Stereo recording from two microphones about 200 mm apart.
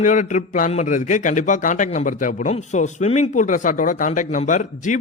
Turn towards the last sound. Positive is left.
turn(degrees=40)  # may be behind; listen again after turning